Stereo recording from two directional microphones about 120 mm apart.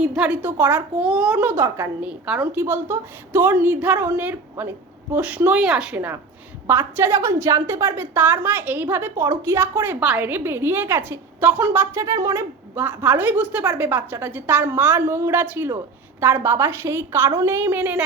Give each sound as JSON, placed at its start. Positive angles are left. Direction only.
{"t": 0.0, "sound": "a woman's voice", "side_deg": -5}